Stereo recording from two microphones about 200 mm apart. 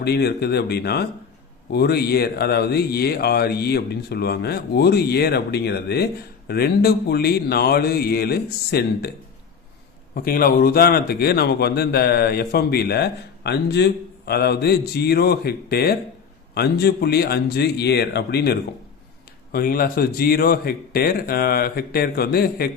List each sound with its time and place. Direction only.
0.0 s a man's voice: 55° left (ahead or behind)
10.2 s a man's voice: 45° left (ahead or behind)